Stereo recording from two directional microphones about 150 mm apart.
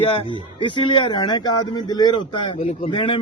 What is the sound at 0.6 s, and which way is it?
A man's voice, 30° left (ahead or behind).